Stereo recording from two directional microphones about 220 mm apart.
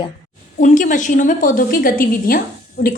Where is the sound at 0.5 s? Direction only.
35° left (ahead or behind).